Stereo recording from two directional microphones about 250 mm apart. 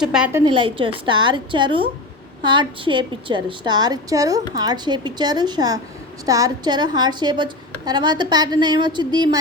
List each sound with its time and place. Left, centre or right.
0.0 s a woman's voice: centre
0.4 s a woman's voice: centre